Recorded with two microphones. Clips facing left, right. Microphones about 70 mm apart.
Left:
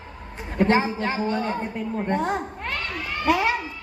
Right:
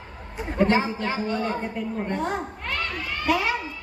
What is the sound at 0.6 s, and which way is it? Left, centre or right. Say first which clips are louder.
A woman's voice: left 2 dB; left.